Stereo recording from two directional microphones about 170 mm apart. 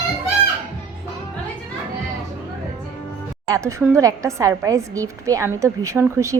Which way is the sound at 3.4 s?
20° right (ahead or behind).